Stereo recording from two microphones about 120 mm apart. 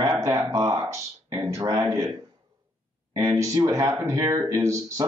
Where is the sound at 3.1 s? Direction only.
25° right (ahead or behind).